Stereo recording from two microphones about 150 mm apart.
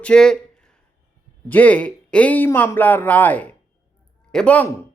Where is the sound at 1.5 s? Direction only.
10° left (ahead or behind).